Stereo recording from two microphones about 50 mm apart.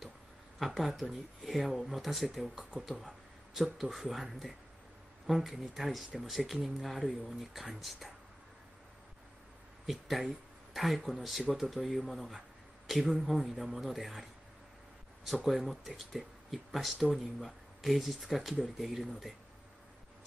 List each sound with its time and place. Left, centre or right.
0.6 s speech: centre
9.8 s speech: centre
15.2 s speech: centre